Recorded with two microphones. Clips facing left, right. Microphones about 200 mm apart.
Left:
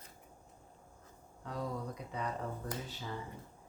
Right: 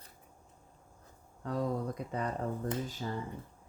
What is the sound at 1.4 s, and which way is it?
Speech, 50° right (ahead or behind).